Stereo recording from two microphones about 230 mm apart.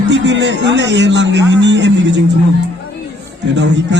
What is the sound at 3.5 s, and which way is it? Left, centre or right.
Speech, right.